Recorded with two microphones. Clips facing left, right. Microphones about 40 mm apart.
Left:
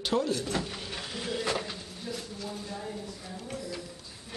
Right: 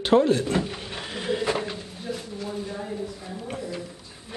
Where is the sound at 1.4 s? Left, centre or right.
Centre.